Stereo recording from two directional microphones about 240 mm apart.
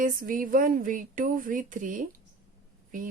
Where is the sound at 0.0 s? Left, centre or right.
Right.